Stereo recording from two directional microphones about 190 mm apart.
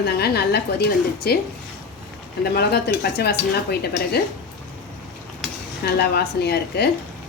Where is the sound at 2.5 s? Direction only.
60° left (ahead or behind).